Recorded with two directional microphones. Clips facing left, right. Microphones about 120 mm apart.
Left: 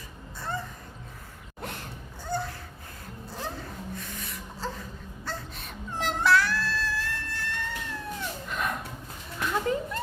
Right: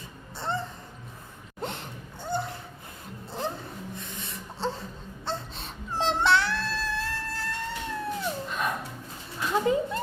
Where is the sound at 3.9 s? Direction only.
25° right (ahead or behind).